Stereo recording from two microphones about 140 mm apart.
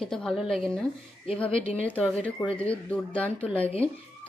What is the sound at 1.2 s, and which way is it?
Speech, 45° left (ahead or behind).